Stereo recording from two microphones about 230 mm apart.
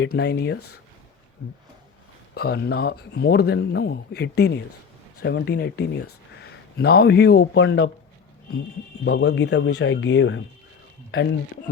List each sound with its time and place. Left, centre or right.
0.0 s a man's voice: left
2.3 s a man's voice: left
9.0 s a man's voice: left